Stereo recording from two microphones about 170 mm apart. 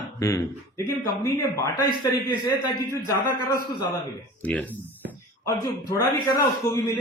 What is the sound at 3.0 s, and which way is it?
A man's voice, 20° left (ahead or behind).